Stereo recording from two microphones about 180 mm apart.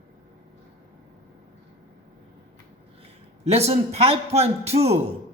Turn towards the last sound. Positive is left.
turn(degrees=-35)  # may be behind; listen again after turning